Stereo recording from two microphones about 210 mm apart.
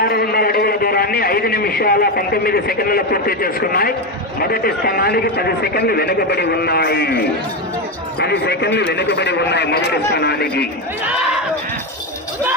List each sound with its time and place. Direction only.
0.0 s a man's voice: 50° left (ahead or behind)